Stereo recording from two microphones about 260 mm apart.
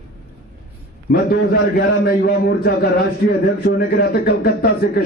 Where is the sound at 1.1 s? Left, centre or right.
Left.